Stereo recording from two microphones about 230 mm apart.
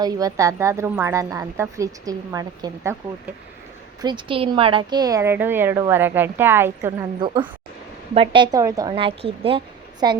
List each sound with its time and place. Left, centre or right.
0.0 s speech: centre
4.0 s a woman's voice: right